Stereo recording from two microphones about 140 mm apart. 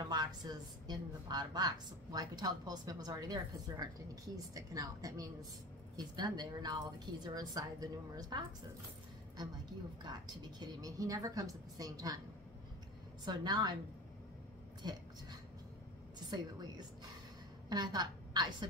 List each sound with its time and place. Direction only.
0.0 s a woman's voice: 30° right (ahead or behind)
10.0 s a woman's voice: 30° right (ahead or behind)
13.2 s speech: 30° right (ahead or behind)
17.6 s a woman's voice: 30° right (ahead or behind)